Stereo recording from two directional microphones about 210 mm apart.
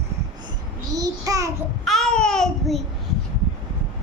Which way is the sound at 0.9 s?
15° right (ahead or behind).